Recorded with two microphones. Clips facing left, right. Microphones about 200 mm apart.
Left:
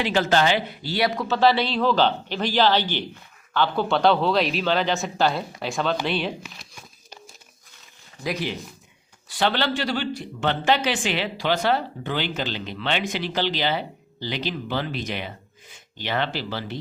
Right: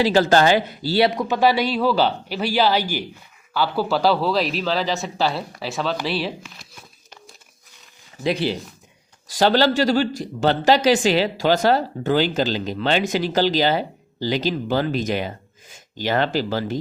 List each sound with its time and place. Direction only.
0.0 s a man's voice: 35° right (ahead or behind); by 6.3 s 5° right (ahead or behind)
8.2 s speech: 30° right (ahead or behind)
9.3 s a man's voice: 40° right (ahead or behind)